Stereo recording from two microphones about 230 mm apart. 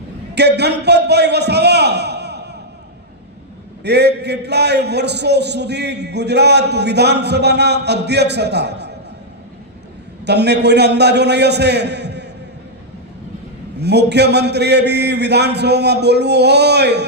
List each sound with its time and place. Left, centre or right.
0.3 s a man's voice: right
3.8 s a man's voice: right
10.2 s a man's voice: right
13.7 s a man's voice: right